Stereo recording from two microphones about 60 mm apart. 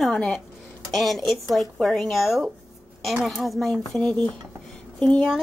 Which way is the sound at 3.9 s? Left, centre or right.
Centre.